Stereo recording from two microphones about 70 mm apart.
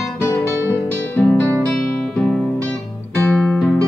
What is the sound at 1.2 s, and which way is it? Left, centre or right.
Music, centre.